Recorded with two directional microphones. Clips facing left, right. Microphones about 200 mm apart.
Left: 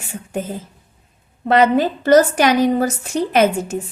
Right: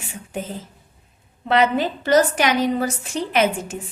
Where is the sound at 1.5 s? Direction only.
45° left (ahead or behind).